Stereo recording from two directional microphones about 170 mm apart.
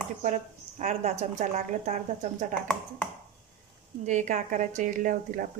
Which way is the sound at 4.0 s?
45° right (ahead or behind).